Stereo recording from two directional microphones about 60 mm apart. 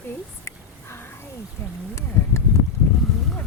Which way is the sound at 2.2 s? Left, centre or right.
Left.